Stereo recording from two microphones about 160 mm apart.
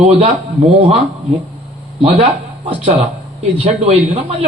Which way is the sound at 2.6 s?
40° right (ahead or behind).